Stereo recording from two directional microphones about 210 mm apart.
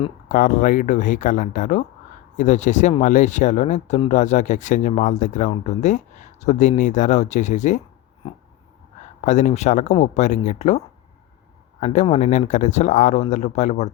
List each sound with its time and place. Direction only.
0.3 s speech: 40° left (ahead or behind)
8.2 s a sound: 25° left (ahead or behind)
9.2 s speech: 35° left (ahead or behind)